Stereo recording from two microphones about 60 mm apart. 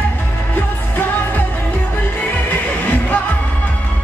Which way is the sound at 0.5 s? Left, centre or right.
Left.